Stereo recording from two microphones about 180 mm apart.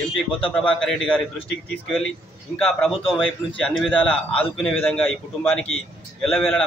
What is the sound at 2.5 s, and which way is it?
A man's voice, 5° left (ahead or behind).